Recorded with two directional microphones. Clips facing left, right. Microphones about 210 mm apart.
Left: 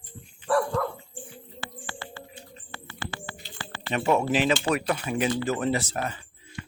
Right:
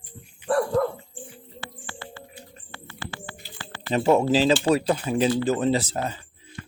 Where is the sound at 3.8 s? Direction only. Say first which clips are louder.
Right 4 dB; 30° right (ahead or behind).